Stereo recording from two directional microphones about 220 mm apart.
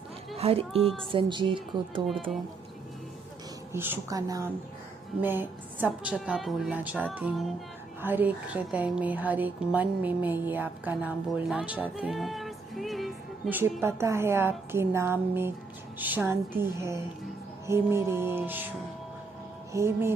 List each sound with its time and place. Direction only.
0.3 s speech: 25° right (ahead or behind)
0.8 s a woman's voice: centre (ahead or behind)
1.1 s speech: 20° right (ahead or behind)
3.7 s a woman's voice: 10° right (ahead or behind)
19.7 s a woman's voice: 10° right (ahead or behind)